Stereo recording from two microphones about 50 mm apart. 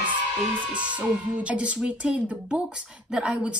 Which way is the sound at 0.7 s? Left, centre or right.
Right.